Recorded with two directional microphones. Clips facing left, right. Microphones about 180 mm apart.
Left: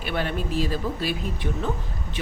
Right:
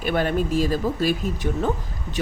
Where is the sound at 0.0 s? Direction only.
45° right (ahead or behind).